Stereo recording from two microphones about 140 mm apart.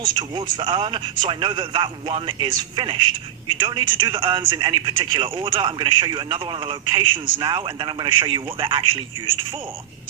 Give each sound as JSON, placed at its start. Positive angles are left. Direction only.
{"t": 0.0, "sound": "a man's voice", "side_deg": -35}